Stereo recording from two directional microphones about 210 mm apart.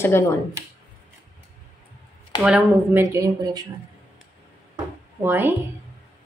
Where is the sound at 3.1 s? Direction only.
15° right (ahead or behind).